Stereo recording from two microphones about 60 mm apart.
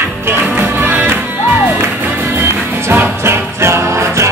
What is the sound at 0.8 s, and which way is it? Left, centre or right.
Music, right.